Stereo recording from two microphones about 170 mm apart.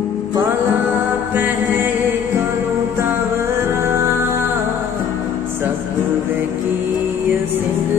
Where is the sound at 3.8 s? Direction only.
15° right (ahead or behind).